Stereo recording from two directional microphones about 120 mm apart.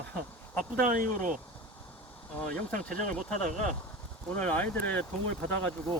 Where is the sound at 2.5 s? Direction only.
90° right.